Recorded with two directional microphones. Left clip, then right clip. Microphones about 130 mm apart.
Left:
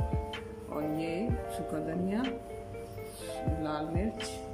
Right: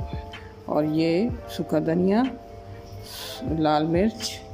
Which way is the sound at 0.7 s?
60° right (ahead or behind).